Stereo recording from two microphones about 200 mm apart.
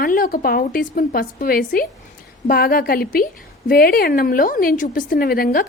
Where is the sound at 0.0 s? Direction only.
45° left (ahead or behind).